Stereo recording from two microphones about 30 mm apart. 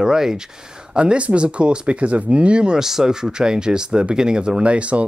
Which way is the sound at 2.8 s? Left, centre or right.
Centre.